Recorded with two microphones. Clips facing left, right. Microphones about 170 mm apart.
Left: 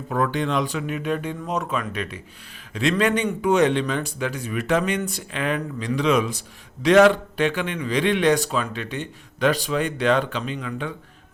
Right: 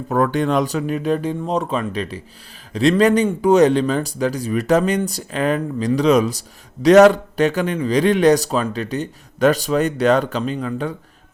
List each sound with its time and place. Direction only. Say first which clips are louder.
0.1 s speech: right 5 dB; 45° right (ahead or behind)